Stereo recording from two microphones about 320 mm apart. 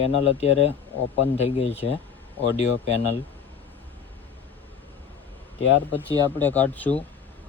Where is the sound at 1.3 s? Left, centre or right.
Centre.